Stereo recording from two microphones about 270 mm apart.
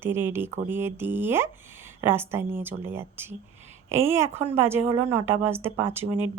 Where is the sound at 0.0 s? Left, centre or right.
Centre.